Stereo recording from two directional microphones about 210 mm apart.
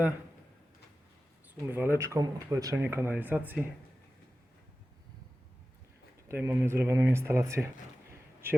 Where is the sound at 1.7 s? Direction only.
10° right (ahead or behind).